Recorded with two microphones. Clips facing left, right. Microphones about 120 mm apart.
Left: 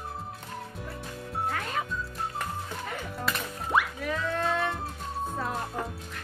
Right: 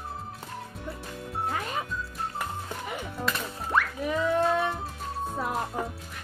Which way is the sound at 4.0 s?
15° right (ahead or behind).